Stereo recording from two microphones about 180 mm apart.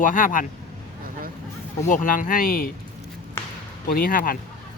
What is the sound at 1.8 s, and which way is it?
Speech, 45° left (ahead or behind).